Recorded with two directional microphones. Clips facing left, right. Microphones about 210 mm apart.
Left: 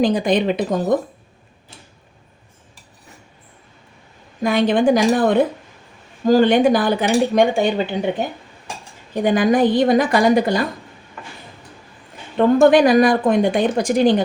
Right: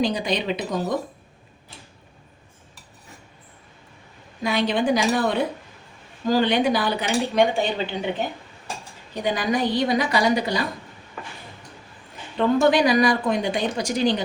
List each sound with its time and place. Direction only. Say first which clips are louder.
0.0 s speech: left 7 dB; 50° left (ahead or behind)
4.4 s speech: left 6 dB; 50° left (ahead or behind)
9.2 s speech: left 8 dB; 50° left (ahead or behind)
12.5 s speech: left 6 dB; 50° left (ahead or behind)